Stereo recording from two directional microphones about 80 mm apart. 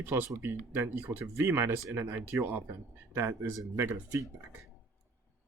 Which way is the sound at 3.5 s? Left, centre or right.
Right.